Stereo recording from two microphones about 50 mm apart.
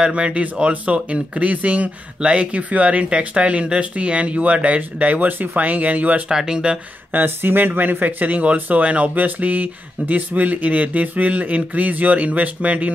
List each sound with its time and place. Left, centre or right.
0.0 s speech: right
6.2 s speech: centre
7.1 s speech: right